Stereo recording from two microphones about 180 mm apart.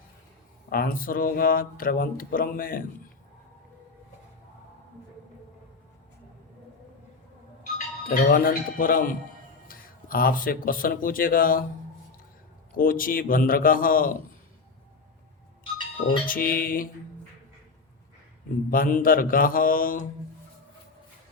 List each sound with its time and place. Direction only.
0.7 s speech: 55° left (ahead or behind)
8.1 s speech: 50° left (ahead or behind)
12.7 s speech: 50° left (ahead or behind)
16.2 s speech: 50° left (ahead or behind)
18.7 s speech: 50° left (ahead or behind)